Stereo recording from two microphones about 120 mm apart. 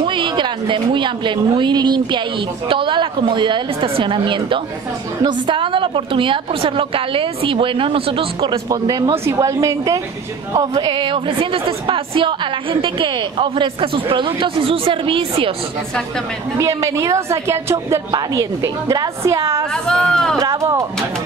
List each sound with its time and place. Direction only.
0.0 s a woman's voice: 45° right (ahead or behind)
8.6 s a woman's voice: 35° right (ahead or behind); by 15.5 s 50° right (ahead or behind)
16.5 s a woman's voice: 25° right (ahead or behind)
19.9 s speech: 5° left (ahead or behind)
20.3 s a woman's voice: 25° right (ahead or behind)